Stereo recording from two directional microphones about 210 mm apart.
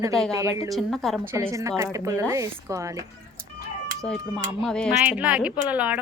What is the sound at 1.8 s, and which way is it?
Speech, 15° right (ahead or behind).